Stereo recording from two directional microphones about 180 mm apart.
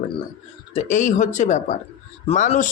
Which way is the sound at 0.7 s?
40° left (ahead or behind).